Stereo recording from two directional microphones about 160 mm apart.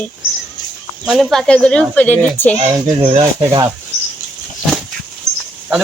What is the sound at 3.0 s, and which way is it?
Speech, 25° right (ahead or behind).